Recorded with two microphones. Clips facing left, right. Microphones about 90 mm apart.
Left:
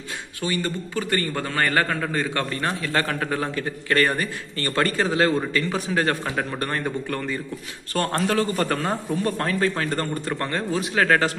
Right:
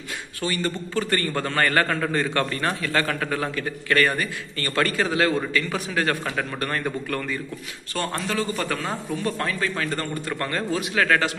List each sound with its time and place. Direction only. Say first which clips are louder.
0.4 s a man's voice: even; 15° left (ahead or behind)
7.9 s speech: left 4 dB; 50° left (ahead or behind)
9.6 s a man's voice: left 3 dB; 30° left (ahead or behind)